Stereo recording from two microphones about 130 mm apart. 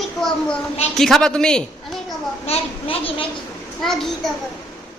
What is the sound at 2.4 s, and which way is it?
Speech, 45° left (ahead or behind).